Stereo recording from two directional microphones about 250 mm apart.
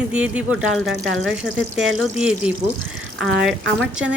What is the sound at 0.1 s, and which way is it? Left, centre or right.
Speech, centre.